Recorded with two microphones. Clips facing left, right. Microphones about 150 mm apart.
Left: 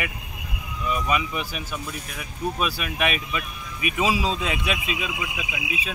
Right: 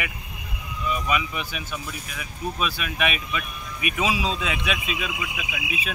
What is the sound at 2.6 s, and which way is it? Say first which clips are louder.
Speech: even; 5° left (ahead or behind).